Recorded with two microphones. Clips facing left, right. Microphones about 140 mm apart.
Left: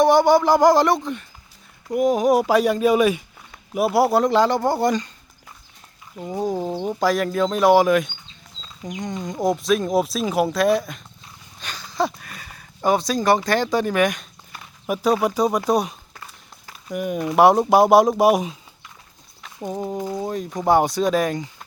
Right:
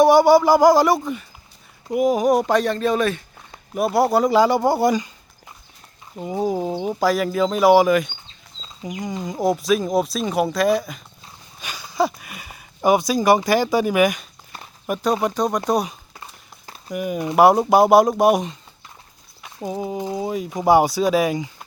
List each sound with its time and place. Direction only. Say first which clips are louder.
0.0 s speech: right 2 dB; 10° right (ahead or behind)
6.1 s speech: right 2 dB; 10° right (ahead or behind)
16.1 s a sound: right 1 dB; 25° right (ahead or behind)
16.9 s speech: even; centre (ahead or behind)